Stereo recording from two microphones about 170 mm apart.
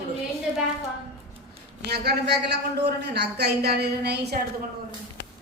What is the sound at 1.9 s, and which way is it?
A man's voice, 80° right.